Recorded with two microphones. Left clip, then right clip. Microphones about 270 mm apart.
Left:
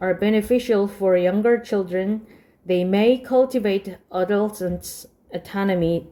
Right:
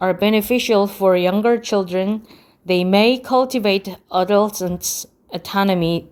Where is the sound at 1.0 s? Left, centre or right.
Right.